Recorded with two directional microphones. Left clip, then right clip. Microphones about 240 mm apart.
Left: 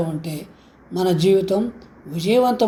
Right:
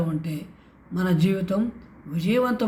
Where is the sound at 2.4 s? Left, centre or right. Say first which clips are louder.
Left 6 dB; right.